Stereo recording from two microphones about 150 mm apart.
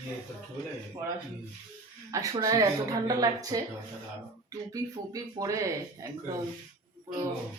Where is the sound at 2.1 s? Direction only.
25° right (ahead or behind).